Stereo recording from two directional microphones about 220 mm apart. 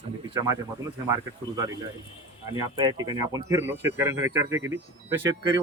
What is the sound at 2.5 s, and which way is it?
Speech, 20° right (ahead or behind).